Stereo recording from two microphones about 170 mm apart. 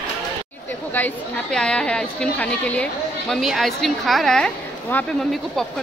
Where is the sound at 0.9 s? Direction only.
10° left (ahead or behind).